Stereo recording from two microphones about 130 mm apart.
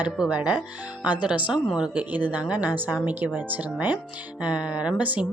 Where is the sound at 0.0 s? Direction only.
10° right (ahead or behind).